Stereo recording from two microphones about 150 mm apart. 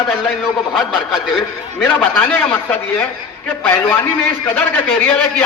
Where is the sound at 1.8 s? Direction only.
15° left (ahead or behind).